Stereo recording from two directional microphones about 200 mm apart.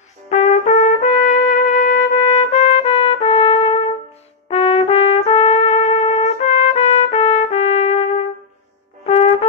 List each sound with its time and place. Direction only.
0.3 s trumpet: 35° left (ahead or behind)
9.0 s music: 30° left (ahead or behind)